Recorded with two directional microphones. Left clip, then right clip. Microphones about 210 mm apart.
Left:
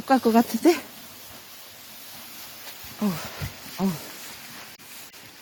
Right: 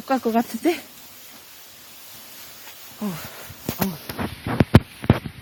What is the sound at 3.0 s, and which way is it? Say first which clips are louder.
Speech: left 2 dB; 5° left (ahead or behind).